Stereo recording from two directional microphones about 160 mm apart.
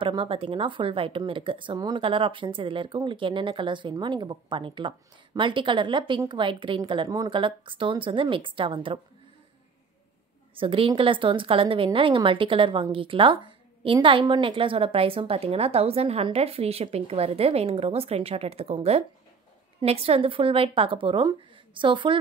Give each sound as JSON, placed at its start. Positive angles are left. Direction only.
{"t": 0.0, "sound": "speech", "side_deg": -35}
{"t": 10.5, "sound": "speech", "side_deg": -35}